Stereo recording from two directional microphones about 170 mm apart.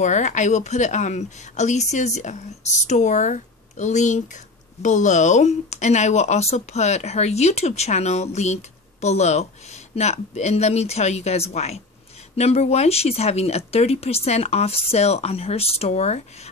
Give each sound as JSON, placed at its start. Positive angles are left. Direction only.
{"t": 0.0, "sound": "speech", "side_deg": 45}